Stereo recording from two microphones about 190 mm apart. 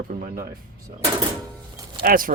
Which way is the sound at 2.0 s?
50° right (ahead or behind).